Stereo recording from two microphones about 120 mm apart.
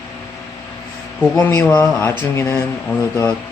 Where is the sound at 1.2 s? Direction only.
15° left (ahead or behind).